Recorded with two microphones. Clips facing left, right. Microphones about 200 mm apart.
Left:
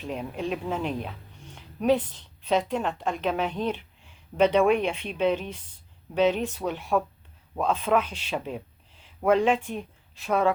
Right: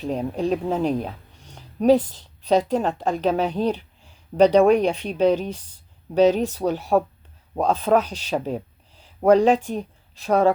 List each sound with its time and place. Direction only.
0.0 s a woman's voice: 35° right (ahead or behind)